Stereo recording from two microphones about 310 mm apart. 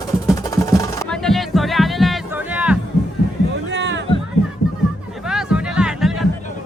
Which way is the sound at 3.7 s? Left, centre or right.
Right.